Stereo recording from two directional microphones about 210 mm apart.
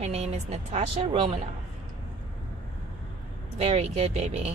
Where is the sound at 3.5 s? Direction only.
30° right (ahead or behind).